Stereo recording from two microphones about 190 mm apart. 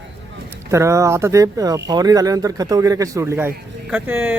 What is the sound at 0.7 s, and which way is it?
Speech, 15° right (ahead or behind).